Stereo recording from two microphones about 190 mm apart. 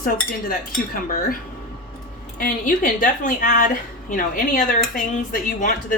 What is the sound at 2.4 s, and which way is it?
A woman's voice, 45° left (ahead or behind).